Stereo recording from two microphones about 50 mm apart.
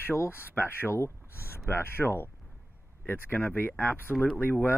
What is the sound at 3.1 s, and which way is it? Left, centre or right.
Speech, left.